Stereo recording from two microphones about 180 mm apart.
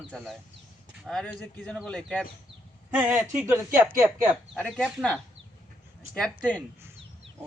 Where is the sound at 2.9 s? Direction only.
10° right (ahead or behind).